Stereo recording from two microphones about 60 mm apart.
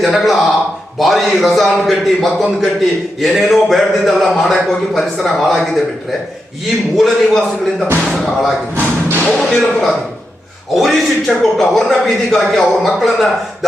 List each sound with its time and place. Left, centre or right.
0.0 s speech: centre
6.9 s speech: centre
8.7 s thump: right
9.3 s speech: centre